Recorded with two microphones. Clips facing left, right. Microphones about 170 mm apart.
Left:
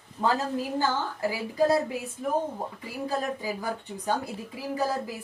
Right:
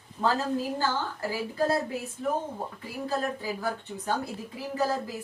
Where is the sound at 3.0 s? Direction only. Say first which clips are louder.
Even; 15° left (ahead or behind).